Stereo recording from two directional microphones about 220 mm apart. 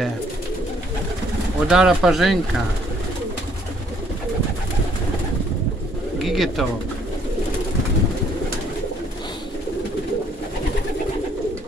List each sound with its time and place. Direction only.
1.7 s speech: 5° right (ahead or behind)
6.2 s speech: centre (ahead or behind)